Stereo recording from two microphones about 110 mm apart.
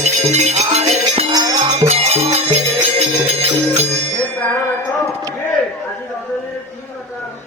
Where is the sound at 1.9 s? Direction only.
70° right (ahead or behind).